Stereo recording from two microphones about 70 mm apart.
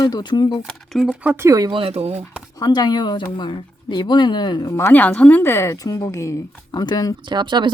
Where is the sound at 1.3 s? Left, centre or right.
Right.